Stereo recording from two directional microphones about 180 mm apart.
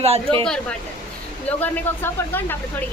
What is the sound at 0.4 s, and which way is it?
Speech, 5° left (ahead or behind).